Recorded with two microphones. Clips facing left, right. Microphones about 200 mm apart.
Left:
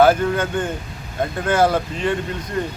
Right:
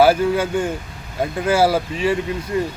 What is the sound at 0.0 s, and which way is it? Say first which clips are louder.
Speech: right 1 dB; 10° right (ahead or behind).